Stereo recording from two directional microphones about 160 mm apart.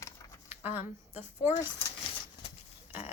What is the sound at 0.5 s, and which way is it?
Speech, 10° right (ahead or behind).